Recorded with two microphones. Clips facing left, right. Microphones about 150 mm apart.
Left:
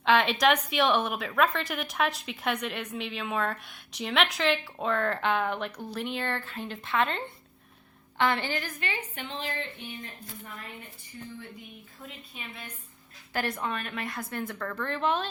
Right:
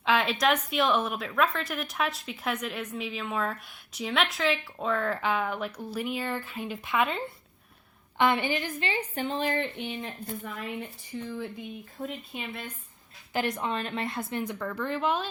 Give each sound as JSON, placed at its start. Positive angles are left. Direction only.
{"t": 0.0, "sound": "a woman's voice", "side_deg": 0}
{"t": 9.3, "sound": "speech", "side_deg": -65}
{"t": 11.1, "sound": "speech", "side_deg": -90}
{"t": 12.0, "sound": "speech", "side_deg": -30}
{"t": 13.3, "sound": "a woman's voice", "side_deg": -20}